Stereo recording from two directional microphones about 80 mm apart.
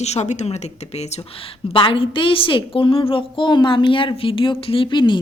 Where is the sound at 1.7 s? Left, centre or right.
Left.